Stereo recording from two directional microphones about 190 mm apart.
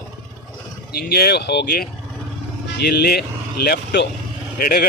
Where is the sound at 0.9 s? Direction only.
55° left (ahead or behind).